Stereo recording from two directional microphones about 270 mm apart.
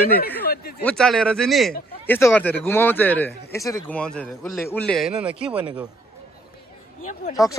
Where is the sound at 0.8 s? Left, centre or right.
Centre.